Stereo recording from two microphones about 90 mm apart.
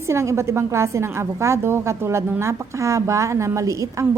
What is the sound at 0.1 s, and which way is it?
A woman's voice, 30° right (ahead or behind).